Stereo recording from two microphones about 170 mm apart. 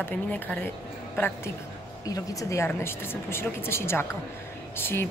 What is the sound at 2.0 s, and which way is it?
A woman's voice, 20° left (ahead or behind).